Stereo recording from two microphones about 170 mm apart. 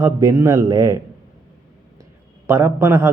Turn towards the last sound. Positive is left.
turn(degrees=-15)  # may be behind; listen again after turning